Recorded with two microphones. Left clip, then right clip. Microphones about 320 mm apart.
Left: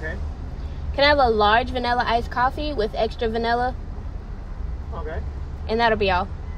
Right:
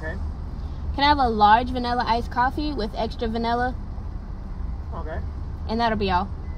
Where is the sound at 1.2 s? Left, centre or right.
Centre.